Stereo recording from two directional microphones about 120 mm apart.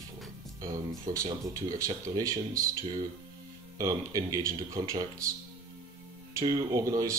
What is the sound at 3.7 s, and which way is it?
Speech, 30° right (ahead or behind).